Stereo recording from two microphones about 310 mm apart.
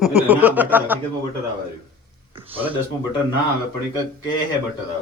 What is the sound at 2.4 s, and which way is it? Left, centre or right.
Speech, centre.